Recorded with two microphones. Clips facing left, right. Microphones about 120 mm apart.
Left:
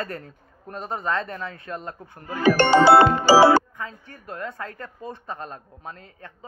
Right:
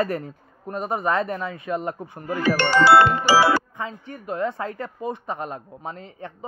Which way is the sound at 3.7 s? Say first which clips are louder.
Right 4 dB; 20° right (ahead or behind).